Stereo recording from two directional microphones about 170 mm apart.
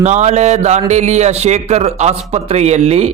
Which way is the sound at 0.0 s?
45° right (ahead or behind).